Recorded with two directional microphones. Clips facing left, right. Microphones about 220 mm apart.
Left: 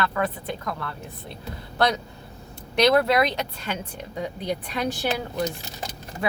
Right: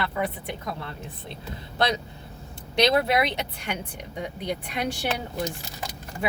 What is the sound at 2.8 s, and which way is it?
Speech, 20° right (ahead or behind).